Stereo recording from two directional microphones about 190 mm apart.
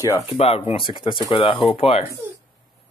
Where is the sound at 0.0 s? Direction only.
15° left (ahead or behind).